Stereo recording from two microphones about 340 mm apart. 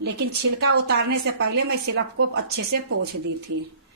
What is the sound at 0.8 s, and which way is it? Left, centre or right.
A woman's voice, right.